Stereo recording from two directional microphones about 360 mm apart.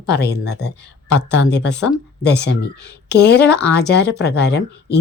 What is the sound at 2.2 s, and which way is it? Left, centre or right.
Speech, left.